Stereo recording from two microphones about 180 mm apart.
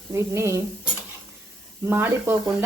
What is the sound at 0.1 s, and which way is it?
Speech, 15° right (ahead or behind).